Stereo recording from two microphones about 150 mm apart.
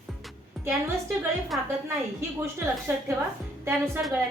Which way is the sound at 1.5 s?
Centre (ahead or behind).